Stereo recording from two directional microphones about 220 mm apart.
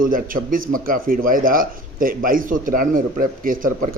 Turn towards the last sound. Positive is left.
turn(degrees=-40)  # may be behind; listen again after turning